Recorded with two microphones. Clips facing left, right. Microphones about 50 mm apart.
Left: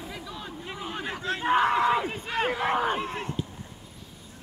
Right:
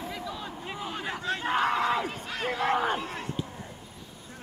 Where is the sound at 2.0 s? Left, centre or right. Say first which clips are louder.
Left 4 dB; left.